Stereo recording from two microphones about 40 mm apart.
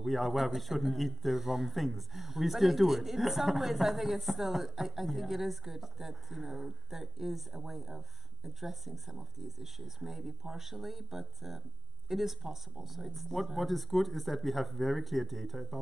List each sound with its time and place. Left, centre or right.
0.0 s a man's voice: centre